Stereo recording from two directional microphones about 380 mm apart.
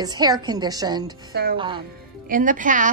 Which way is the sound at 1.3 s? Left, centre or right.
Right.